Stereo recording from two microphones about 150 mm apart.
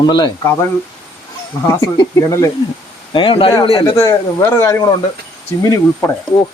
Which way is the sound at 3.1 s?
35° left (ahead or behind).